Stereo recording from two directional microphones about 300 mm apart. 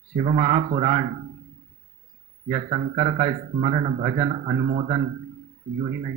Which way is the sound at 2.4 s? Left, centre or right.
Right.